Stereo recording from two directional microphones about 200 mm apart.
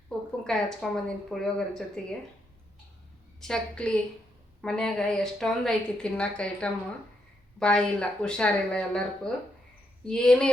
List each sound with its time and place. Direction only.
0.1 s a sound: 5° left (ahead or behind)
0.4 s a woman's voice: 5° left (ahead or behind)
3.4 s a woman's voice: 5° left (ahead or behind)